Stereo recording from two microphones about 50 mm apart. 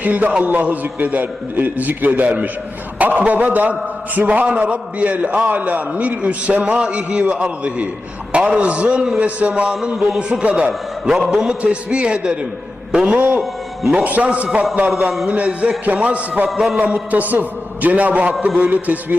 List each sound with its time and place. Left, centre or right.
0.0 s a man's voice: right
11.3 s a man's voice: centre
13.1 s a man's voice: right
16.5 s a man's voice: centre
16.7 s a man's voice: right